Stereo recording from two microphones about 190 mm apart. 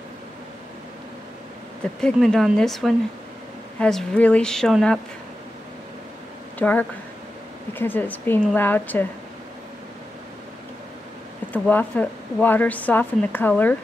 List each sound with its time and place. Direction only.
2.0 s speech: centre (ahead or behind)
6.6 s speech: 10° left (ahead or behind)
11.5 s speech: 10° left (ahead or behind)